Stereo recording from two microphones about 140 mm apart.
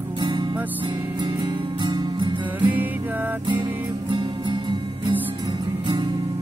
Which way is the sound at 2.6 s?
10° right (ahead or behind).